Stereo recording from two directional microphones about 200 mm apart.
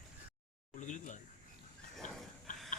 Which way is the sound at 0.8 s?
40° left (ahead or behind).